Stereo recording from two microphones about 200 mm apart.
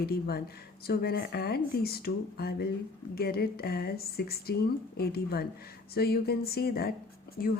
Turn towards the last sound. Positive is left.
turn(degrees=50)  # may be behind; listen again after turning